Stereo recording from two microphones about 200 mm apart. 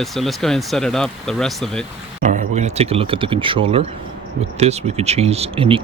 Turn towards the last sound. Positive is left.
turn(degrees=-25)  # may be behind; listen again after turning